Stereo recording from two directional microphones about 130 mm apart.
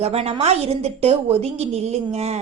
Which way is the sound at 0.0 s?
55° right (ahead or behind).